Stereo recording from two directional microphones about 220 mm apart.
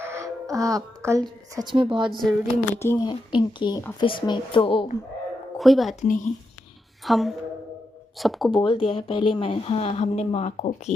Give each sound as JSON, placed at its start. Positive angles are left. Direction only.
{"t": 0.0, "sound": "speech", "side_deg": -10}
{"t": 2.0, "sound": "speech", "side_deg": 0}
{"t": 2.7, "sound": "speech", "side_deg": 10}
{"t": 5.5, "sound": "speech", "side_deg": 0}
{"t": 6.0, "sound": "speech", "side_deg": 35}
{"t": 7.0, "sound": "speech", "side_deg": 0}
{"t": 8.6, "sound": "speech", "side_deg": 25}